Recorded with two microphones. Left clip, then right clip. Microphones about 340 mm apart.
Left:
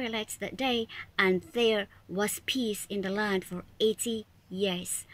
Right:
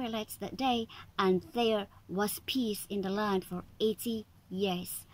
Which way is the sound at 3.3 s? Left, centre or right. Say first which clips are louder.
Left 2 dB; centre.